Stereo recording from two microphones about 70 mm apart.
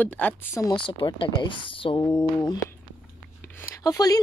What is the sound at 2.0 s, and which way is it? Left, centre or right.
Mantra, left.